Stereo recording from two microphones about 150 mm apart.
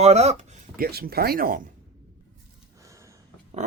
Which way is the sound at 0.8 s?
90° right.